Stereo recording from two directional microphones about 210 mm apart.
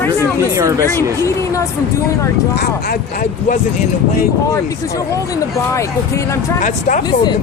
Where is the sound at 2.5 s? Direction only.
50° left (ahead or behind).